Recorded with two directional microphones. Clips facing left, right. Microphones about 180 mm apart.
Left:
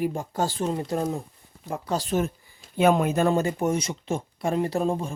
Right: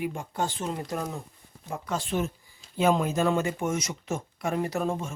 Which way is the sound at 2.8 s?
60° left (ahead or behind).